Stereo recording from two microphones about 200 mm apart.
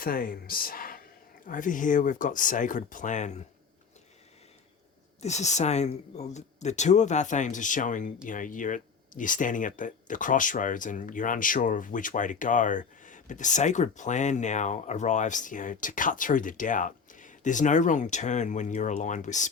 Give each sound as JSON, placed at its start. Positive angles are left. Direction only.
{"t": 0.0, "sound": "speech", "side_deg": 45}
{"t": 5.2, "sound": "speech", "side_deg": 35}